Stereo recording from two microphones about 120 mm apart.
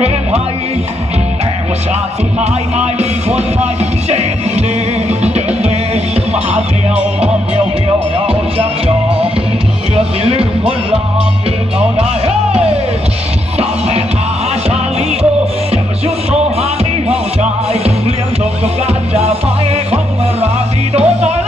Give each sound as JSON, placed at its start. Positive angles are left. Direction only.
{"t": 5.2, "sound": "music", "side_deg": -65}
{"t": 8.3, "sound": "music", "side_deg": -55}
{"t": 10.2, "sound": "music", "side_deg": -55}
{"t": 13.6, "sound": "music", "side_deg": -60}
{"t": 17.1, "sound": "music", "side_deg": -60}
{"t": 20.9, "sound": "music", "side_deg": -60}